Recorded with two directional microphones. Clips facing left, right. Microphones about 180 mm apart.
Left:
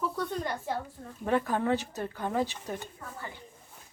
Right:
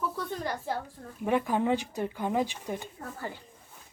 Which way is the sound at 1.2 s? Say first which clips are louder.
Right 1 dB; 15° right (ahead or behind).